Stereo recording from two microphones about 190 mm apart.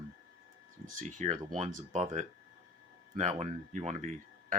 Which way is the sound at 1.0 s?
40° right (ahead or behind).